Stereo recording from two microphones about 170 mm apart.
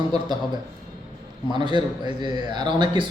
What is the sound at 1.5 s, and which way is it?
A man's voice, 25° right (ahead or behind).